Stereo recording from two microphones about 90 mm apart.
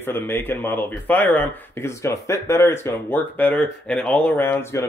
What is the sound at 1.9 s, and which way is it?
Speech, 30° left (ahead or behind).